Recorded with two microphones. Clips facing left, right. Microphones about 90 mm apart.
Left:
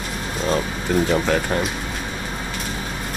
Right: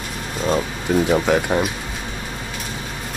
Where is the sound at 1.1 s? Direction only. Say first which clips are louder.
Right 2 dB; 5° right (ahead or behind).